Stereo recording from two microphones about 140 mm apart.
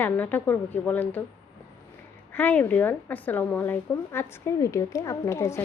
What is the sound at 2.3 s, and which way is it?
A woman's voice, 15° left (ahead or behind).